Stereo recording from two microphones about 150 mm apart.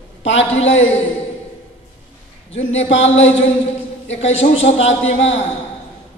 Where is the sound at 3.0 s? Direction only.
45° left (ahead or behind).